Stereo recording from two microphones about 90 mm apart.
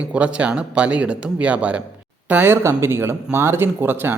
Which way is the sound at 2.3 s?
25° right (ahead or behind).